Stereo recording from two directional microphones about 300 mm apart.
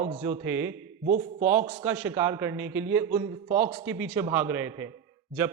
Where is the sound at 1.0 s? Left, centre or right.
Right.